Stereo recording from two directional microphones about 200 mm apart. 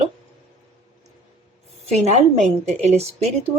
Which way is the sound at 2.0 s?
35° right (ahead or behind).